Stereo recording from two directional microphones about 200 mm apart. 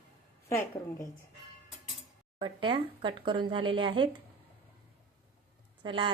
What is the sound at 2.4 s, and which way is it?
Speech, 25° right (ahead or behind).